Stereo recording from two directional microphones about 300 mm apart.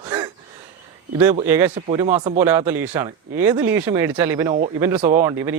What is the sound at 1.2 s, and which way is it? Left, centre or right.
Speech, centre.